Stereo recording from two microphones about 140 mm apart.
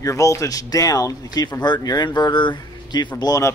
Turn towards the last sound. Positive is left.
turn(degrees=25)  # may be behind; listen again after turning